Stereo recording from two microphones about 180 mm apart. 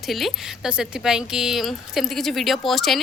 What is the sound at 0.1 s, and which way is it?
Speech, centre (ahead or behind).